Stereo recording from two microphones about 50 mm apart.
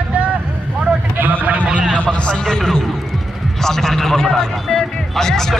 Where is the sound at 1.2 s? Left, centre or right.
Right.